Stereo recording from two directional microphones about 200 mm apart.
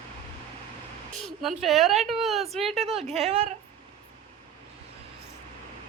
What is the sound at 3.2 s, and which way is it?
Speech, 30° right (ahead or behind).